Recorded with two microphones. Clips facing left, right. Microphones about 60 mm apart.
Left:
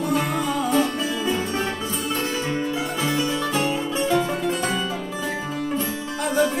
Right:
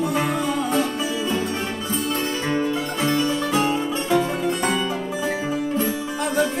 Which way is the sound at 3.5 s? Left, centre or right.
Right.